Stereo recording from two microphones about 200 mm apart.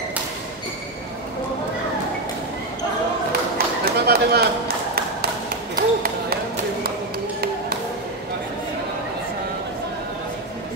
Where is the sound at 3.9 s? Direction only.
50° right (ahead or behind).